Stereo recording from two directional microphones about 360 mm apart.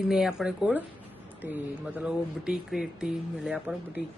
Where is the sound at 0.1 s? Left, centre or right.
Centre.